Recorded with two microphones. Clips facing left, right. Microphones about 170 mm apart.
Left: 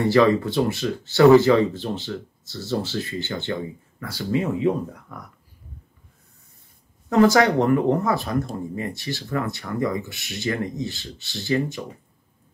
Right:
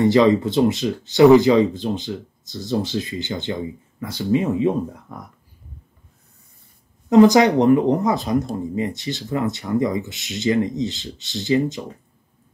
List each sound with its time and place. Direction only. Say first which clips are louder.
0.0 s speech: right 3 dB; 20° right (ahead or behind)
7.1 s speech: right 4 dB; 20° right (ahead or behind)